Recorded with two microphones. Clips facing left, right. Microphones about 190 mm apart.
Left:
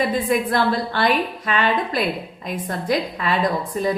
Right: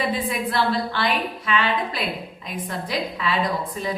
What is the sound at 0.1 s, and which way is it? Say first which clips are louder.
A woman's voice: left 5 dB; 45° left (ahead or behind).